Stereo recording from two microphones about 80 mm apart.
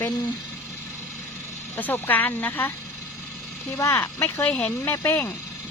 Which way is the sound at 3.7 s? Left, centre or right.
Left.